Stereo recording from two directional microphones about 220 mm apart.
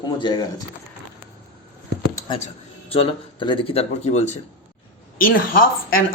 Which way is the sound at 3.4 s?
20° left (ahead or behind).